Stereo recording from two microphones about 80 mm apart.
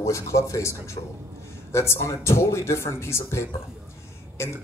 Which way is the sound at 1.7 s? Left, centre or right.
Left.